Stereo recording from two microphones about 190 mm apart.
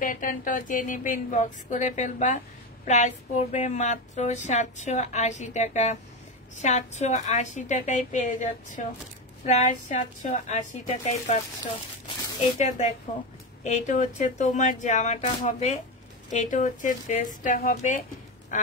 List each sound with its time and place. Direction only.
0.0 s speech: 45° left (ahead or behind)
12.5 s speech: 40° left (ahead or behind)
18.5 s quack: 40° left (ahead or behind)